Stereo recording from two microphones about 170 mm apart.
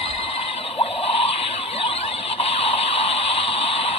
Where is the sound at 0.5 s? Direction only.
35° left (ahead or behind).